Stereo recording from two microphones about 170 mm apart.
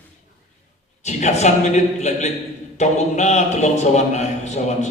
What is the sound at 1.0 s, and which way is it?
A man's voice, 40° left (ahead or behind).